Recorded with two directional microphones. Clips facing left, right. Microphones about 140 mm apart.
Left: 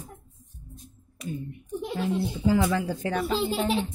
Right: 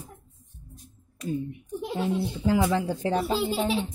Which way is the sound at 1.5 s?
10° right (ahead or behind).